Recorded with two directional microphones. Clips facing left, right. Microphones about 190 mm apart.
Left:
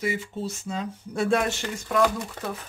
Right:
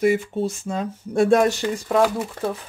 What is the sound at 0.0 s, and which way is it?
Speech, 55° right (ahead or behind).